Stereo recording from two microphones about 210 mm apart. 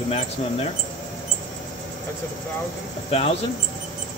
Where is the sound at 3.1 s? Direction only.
30° left (ahead or behind).